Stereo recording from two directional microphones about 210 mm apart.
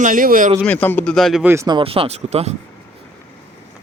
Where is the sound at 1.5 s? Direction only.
20° right (ahead or behind).